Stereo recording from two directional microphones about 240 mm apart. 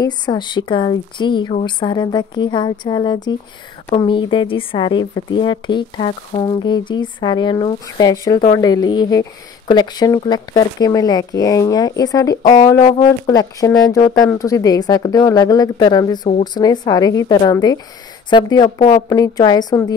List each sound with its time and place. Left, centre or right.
0.0 s a woman's voice: centre